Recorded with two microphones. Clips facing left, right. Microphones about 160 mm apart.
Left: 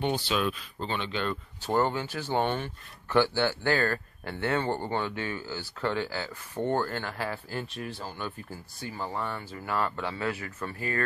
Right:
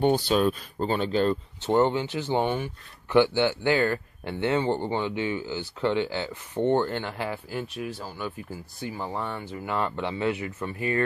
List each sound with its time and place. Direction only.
0.0 s speech: 45° right (ahead or behind)
1.6 s speech: 20° right (ahead or behind)